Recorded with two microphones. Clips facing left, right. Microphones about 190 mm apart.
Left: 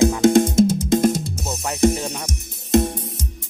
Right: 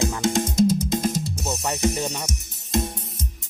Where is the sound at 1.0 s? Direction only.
60° left (ahead or behind).